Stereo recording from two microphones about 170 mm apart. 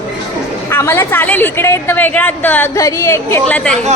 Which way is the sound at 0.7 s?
15° left (ahead or behind).